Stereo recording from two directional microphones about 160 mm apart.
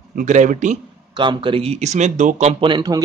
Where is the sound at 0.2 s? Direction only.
50° right (ahead or behind).